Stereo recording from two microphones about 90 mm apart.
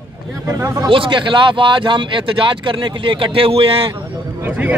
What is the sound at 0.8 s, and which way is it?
Speech, 65° right (ahead or behind).